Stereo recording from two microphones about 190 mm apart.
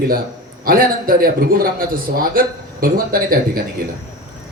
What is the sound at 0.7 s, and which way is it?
A man's voice, 50° right (ahead or behind).